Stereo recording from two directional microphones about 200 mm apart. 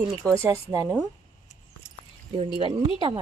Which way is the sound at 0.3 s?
15° right (ahead or behind).